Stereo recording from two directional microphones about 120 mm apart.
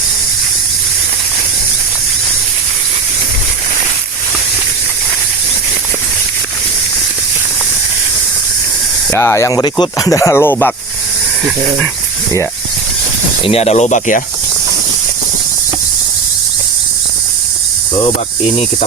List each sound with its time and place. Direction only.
9.0 s speech: 20° left (ahead or behind); by 10.1 s 40° left (ahead or behind)
10.1 s speech: 25° left (ahead or behind)
13.4 s speech: 60° left (ahead or behind); by 14.2 s 80° left